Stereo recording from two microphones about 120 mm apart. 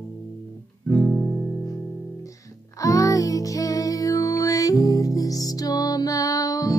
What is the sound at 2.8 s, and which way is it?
Music, 30° left (ahead or behind).